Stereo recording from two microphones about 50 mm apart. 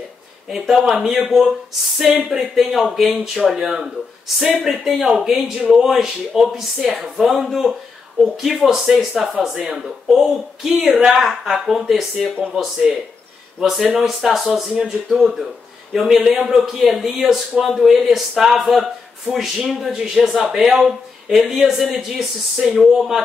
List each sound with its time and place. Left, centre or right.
0.5 s speech: centre
12.9 s speech: centre
13.6 s speech: centre
21.4 s speech: centre